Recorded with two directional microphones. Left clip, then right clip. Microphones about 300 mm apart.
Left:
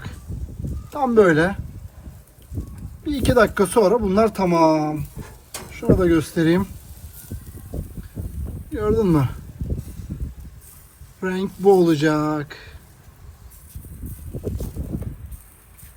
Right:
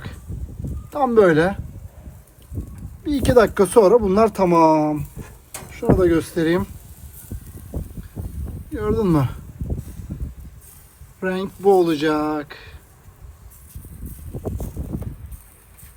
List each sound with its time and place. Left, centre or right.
0.9 s speech: right
3.0 s speech: right
8.7 s speech: right
11.2 s speech: right